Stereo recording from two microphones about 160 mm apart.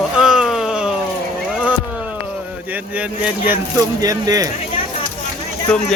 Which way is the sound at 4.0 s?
20° right (ahead or behind).